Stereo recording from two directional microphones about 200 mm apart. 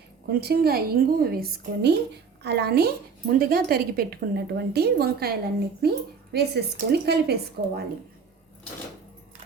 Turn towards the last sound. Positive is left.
turn(degrees=-55)  # may be behind; listen again after turning